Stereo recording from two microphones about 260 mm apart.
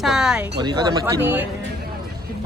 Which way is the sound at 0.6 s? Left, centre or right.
Centre.